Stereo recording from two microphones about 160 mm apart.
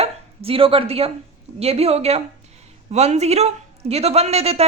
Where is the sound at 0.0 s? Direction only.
35° right (ahead or behind).